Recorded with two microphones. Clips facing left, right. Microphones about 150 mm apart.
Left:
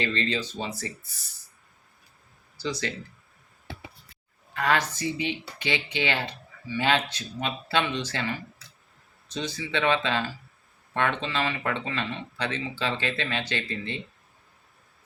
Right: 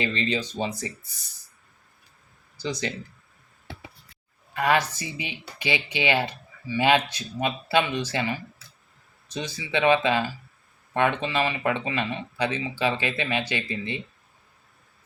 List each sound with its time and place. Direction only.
0.0 s speech: 15° right (ahead or behind)
2.6 s speech: 15° right (ahead or behind)
4.5 s speech: 10° right (ahead or behind)